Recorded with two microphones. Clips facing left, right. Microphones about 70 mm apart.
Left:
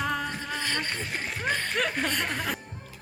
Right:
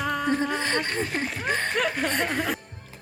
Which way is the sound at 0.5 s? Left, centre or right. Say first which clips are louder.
Right 5 dB; right.